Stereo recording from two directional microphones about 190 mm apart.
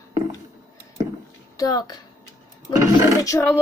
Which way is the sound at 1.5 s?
20° left (ahead or behind).